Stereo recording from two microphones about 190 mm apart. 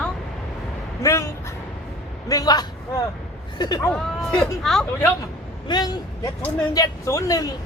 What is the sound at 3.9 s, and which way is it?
Speech, 5° left (ahead or behind).